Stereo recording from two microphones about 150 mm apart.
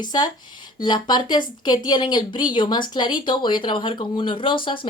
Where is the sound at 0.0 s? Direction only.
25° left (ahead or behind).